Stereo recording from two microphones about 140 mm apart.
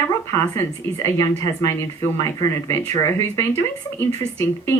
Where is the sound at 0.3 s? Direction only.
20° left (ahead or behind).